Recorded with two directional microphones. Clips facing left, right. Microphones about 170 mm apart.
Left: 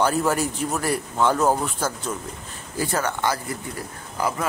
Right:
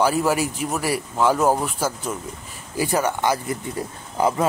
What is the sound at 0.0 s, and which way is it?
Speech, 5° right (ahead or behind).